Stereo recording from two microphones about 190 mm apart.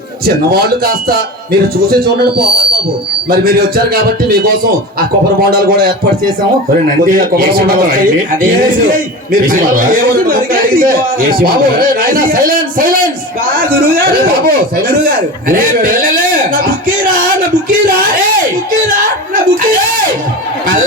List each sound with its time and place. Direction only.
0.3 s a man's voice: 55° right (ahead or behind)
16.6 s music: 45° right (ahead or behind)
18.8 s a man's voice: 45° right (ahead or behind)